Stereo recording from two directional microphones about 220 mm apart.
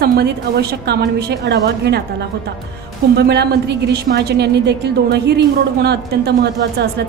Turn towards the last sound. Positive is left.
turn(degrees=-45)  # may be behind; listen again after turning